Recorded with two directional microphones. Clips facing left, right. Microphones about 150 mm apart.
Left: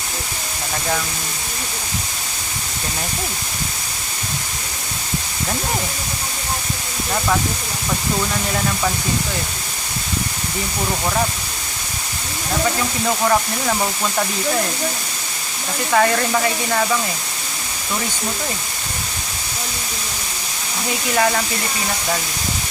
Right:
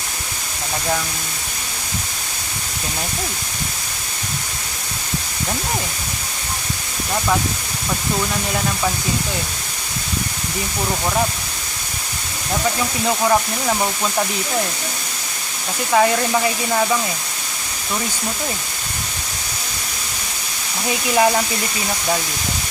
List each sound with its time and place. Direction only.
15.9 s speech: 10° right (ahead or behind)
21.2 s speech: 20° right (ahead or behind)